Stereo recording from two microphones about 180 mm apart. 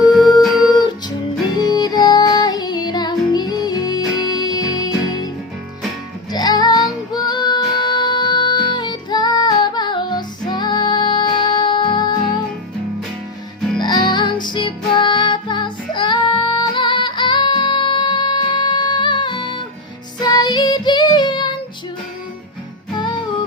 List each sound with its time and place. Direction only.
1.5 s music: 20° left (ahead or behind)
6.3 s female singing: 20° left (ahead or behind)
13.7 s music: 25° left (ahead or behind)
23.0 s music: 25° left (ahead or behind)